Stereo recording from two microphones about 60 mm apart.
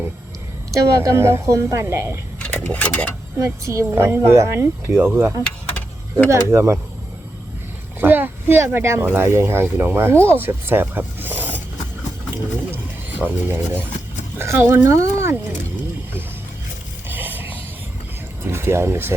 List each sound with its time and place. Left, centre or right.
0.7 s a woman's voice: right
2.4 s speech: left
3.3 s a woman's voice: right
5.4 s vehicle: left
6.3 s speech: right
8.0 s a sound: right
8.6 s speech: right
13.2 s speech: right
14.8 s a woman's voice: right
17.1 s vehicle: right
18.5 s speech: right